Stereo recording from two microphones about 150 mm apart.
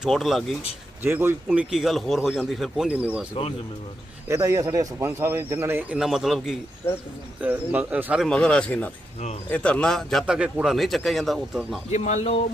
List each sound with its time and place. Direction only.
0.0 s a man's voice: centre (ahead or behind)
1.0 s speech: 15° right (ahead or behind)
1.5 s a man's voice: 5° right (ahead or behind)
4.3 s speech: 20° right (ahead or behind)
6.0 s a man's voice: centre (ahead or behind)
8.2 s a man's voice: 5° left (ahead or behind)
11.9 s speech: 50° left (ahead or behind)